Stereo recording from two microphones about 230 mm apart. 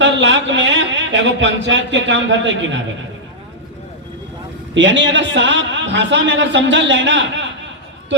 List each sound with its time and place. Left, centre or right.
0.0 s a man's voice: right
4.7 s a man's voice: right